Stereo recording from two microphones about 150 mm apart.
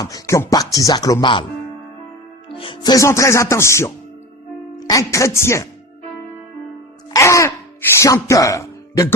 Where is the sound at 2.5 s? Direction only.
35° left (ahead or behind); by 5.7 s 20° left (ahead or behind).